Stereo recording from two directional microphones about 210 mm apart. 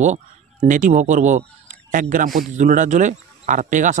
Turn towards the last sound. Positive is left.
turn(degrees=-35)  # may be behind; listen again after turning